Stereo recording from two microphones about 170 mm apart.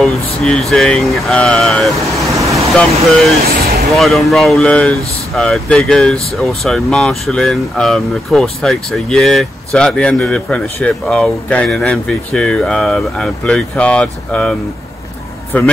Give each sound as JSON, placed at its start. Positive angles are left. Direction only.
{"t": 0.0, "sound": "speech", "side_deg": 0}
{"t": 2.3, "sound": "vehicle", "side_deg": -20}
{"t": 2.7, "sound": "speech", "side_deg": 5}
{"t": 15.5, "sound": "a man's voice", "side_deg": 10}